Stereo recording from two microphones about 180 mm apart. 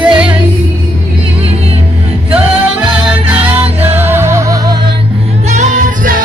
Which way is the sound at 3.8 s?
10° right (ahead or behind).